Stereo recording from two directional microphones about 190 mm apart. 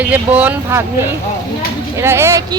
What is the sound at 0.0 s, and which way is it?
Speech, 10° right (ahead or behind).